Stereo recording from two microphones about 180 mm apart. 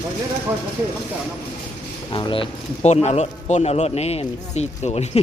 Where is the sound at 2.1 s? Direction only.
30° left (ahead or behind).